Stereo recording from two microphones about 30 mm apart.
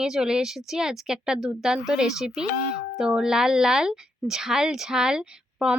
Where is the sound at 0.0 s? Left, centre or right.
Right.